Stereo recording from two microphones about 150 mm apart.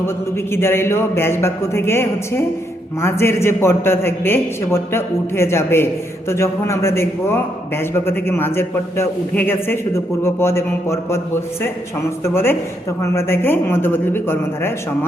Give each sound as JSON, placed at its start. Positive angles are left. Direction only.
{"t": 0.5, "sound": "a man's voice", "side_deg": 15}
{"t": 12.2, "sound": "a man's voice", "side_deg": 15}